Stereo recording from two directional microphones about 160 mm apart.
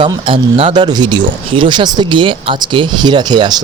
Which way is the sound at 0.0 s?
30° right (ahead or behind).